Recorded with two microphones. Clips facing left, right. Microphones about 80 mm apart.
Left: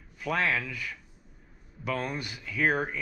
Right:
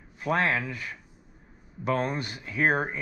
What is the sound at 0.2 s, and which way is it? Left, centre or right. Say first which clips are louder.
Speech: right 3 dB; right.